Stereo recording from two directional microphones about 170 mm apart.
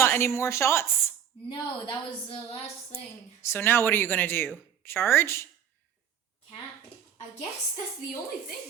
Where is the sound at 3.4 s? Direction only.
15° left (ahead or behind).